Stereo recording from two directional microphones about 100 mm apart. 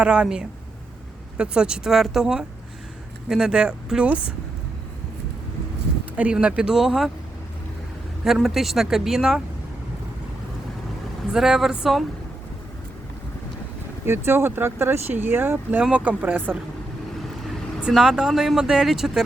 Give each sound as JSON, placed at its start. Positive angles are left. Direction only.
{"t": 0.0, "sound": "speech", "side_deg": -10}
{"t": 6.1, "sound": "speech", "side_deg": -15}
{"t": 8.2, "sound": "speech", "side_deg": 0}
{"t": 11.3, "sound": "speech", "side_deg": -5}
{"t": 14.0, "sound": "speech", "side_deg": -25}
{"t": 17.8, "sound": "speech", "side_deg": -5}